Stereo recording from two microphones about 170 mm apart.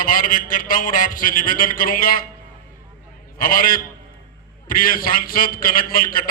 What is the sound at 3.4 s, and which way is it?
A man's voice, 55° left (ahead or behind).